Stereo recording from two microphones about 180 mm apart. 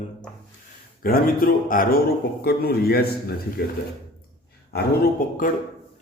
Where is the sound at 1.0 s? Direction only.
55° left (ahead or behind).